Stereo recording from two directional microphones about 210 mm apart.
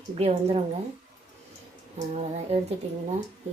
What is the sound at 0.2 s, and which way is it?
Speech, 30° right (ahead or behind).